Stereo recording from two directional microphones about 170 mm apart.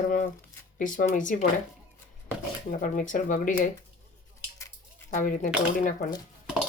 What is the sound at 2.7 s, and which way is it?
Speech, 50° left (ahead or behind).